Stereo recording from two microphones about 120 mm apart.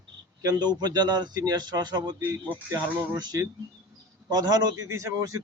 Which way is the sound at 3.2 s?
35° right (ahead or behind).